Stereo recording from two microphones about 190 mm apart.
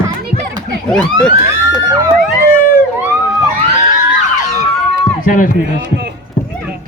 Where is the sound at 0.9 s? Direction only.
5° left (ahead or behind).